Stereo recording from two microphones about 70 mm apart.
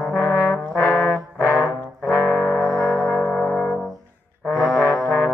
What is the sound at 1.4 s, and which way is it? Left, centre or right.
Brass instrument, left.